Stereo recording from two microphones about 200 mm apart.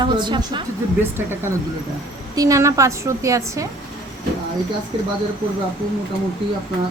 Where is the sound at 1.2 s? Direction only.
10° right (ahead or behind).